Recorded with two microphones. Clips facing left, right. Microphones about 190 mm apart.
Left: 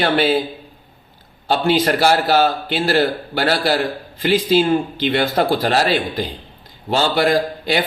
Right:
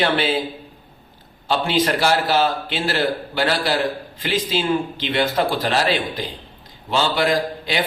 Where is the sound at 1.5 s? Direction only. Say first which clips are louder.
Left 3 dB; 45° left (ahead or behind).